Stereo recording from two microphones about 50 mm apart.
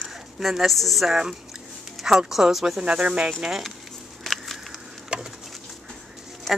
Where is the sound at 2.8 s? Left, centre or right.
Right.